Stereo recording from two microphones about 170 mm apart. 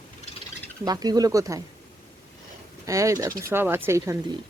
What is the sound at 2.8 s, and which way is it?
Speech, 20° right (ahead or behind).